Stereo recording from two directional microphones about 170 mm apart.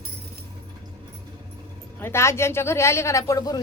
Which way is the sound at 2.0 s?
15° left (ahead or behind).